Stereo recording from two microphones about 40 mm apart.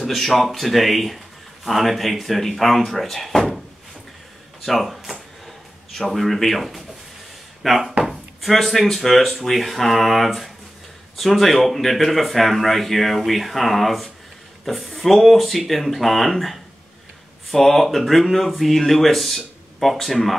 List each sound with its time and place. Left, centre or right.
0.0 s speech: centre
4.6 s speech: centre